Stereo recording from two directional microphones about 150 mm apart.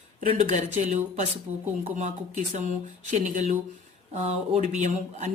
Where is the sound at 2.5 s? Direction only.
50° right (ahead or behind).